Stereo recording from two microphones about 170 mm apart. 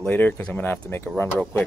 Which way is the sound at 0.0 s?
10° left (ahead or behind).